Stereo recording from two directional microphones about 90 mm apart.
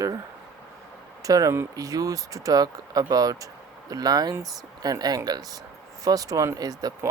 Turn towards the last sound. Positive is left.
turn(degrees=-45)  # may be behind; listen again after turning